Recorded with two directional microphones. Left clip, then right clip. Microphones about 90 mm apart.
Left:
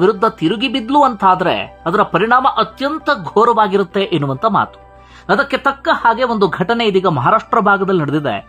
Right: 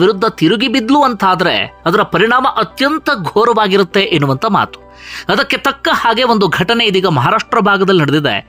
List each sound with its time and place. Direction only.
0.0 s speech: 35° right (ahead or behind)
1.3 s speech: 30° right (ahead or behind); by 3.7 s 45° right (ahead or behind)
3.7 s speech: 30° right (ahead or behind); by 6.6 s 45° right (ahead or behind)
6.6 s speech: 25° right (ahead or behind)